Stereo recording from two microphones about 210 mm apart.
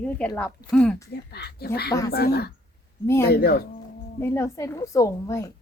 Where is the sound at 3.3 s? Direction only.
45° left (ahead or behind).